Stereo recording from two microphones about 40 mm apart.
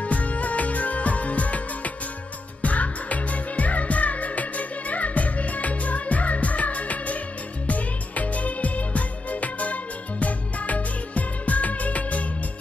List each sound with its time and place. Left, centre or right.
0.0 s music: left
2.6 s music: left